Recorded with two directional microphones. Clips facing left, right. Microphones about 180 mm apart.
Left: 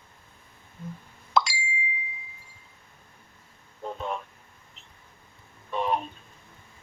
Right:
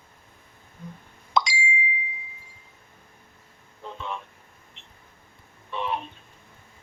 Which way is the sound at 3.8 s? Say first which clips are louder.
Left 3 dB; 45° left (ahead or behind).